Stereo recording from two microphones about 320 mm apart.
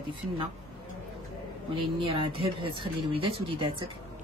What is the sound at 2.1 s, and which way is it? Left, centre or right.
Speech, centre.